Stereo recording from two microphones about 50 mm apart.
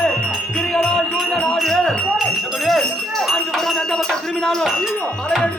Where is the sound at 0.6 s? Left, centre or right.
Centre.